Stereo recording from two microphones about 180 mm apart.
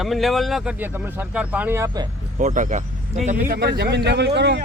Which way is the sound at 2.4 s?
45° right (ahead or behind).